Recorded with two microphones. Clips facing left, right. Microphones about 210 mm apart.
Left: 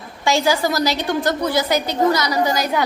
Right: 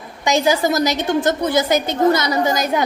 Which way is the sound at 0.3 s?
20° right (ahead or behind).